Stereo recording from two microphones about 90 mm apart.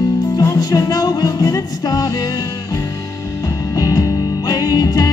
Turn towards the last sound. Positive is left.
turn(degrees=50)  # may be behind; listen again after turning